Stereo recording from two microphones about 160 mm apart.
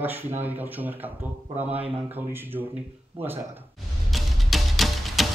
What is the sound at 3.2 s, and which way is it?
Speech, 15° right (ahead or behind).